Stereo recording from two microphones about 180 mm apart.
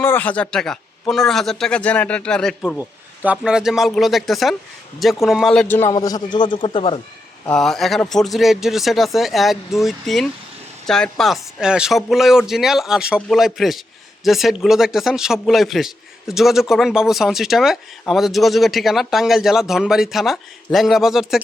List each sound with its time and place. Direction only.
0.0 s a man's voice: 10° left (ahead or behind)
5.9 s a man's voice: 20° left (ahead or behind)
7.5 s a man's voice: centre (ahead or behind)